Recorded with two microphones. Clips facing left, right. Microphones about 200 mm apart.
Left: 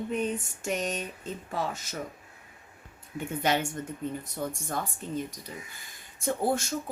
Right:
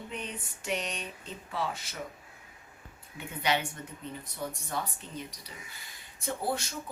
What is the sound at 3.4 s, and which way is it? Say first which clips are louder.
Speech: left 2 dB; 45° left (ahead or behind).